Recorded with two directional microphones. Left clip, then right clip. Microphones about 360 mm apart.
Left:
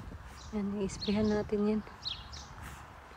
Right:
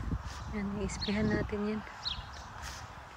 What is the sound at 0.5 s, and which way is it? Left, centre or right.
Speech, centre.